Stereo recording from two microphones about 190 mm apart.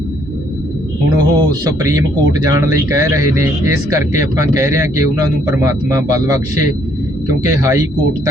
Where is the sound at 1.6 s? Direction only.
20° right (ahead or behind).